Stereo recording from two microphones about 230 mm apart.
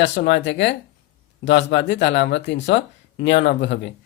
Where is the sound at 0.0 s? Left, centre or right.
Left.